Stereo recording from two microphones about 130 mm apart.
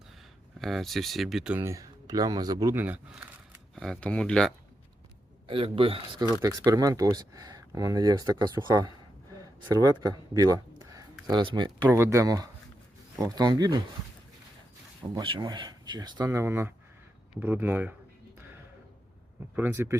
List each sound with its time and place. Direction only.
0.6 s speech: centre (ahead or behind)
1.5 s speech: 25° right (ahead or behind)
2.7 s speech: 15° right (ahead or behind)
3.8 s speech: 5° left (ahead or behind)
5.5 s a man's voice: 45° right (ahead or behind)
6.4 s speech: 25° right (ahead or behind)
11.9 s speech: 20° right (ahead or behind)
15.1 s speech: 35° right (ahead or behind); by 17.9 s 15° right (ahead or behind)
19.5 s speech: 20° right (ahead or behind)